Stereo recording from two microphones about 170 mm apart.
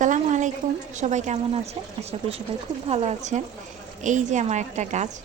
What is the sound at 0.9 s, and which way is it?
A woman's voice, 45° right (ahead or behind).